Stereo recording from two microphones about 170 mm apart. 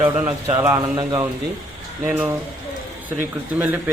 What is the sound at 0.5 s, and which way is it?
Speech, 15° right (ahead or behind).